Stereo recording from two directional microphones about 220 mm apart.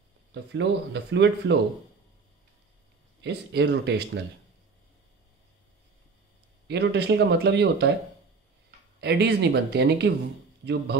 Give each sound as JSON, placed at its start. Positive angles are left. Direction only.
{"t": 0.3, "sound": "speech", "side_deg": -55}
{"t": 3.2, "sound": "speech", "side_deg": -50}
{"t": 6.7, "sound": "speech", "side_deg": -50}
{"t": 9.0, "sound": "speech", "side_deg": -50}